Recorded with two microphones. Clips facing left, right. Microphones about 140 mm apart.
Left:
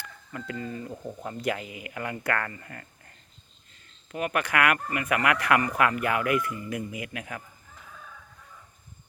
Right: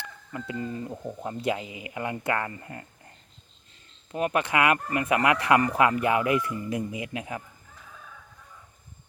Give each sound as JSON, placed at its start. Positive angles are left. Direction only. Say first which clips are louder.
{"t": 0.0, "sound": "speech", "louder": "right 2 dB", "side_deg": -25}
{"t": 4.1, "sound": "speech", "louder": "right 2 dB", "side_deg": -25}